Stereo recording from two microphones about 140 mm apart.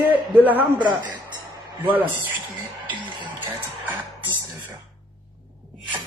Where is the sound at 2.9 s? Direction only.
35° right (ahead or behind).